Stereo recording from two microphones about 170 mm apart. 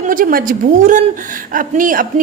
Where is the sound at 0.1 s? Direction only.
55° right (ahead or behind).